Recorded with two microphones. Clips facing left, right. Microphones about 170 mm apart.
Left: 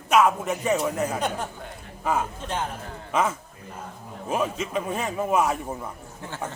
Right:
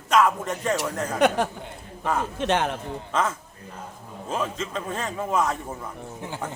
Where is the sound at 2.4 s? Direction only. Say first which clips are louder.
Right 7 dB; 80° right.